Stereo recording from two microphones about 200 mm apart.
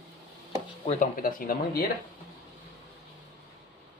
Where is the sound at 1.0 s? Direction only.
45° left (ahead or behind).